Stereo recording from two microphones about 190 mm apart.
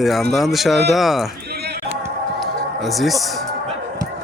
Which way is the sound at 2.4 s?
Centre (ahead or behind).